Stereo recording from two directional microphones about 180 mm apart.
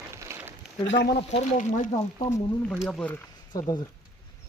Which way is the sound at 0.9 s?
70° left (ahead or behind).